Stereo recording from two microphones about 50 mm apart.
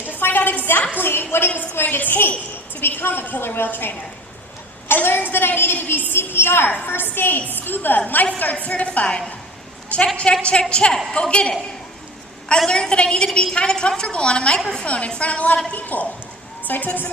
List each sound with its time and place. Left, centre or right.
0.2 s a sound: left
0.9 s a woman's voice: left
12.5 s a woman's voice: centre; by 17.1 s left